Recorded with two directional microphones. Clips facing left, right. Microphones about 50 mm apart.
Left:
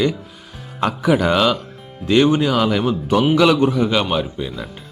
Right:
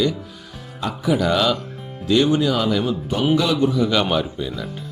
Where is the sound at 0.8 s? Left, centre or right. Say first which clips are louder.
Left 4 dB; left.